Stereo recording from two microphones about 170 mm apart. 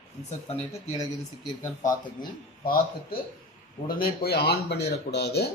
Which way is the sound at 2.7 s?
60° left (ahead or behind).